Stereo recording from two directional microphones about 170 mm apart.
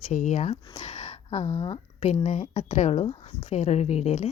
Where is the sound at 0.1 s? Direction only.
45° left (ahead or behind).